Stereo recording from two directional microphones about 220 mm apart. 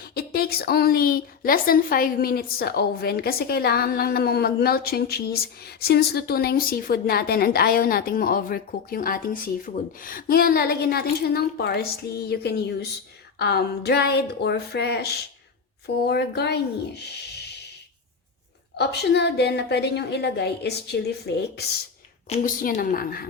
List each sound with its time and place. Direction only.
0.0 s a woman's voice: 45° left (ahead or behind)
18.8 s a woman's voice: 50° left (ahead or behind)
22.3 s a woman's voice: 35° left (ahead or behind)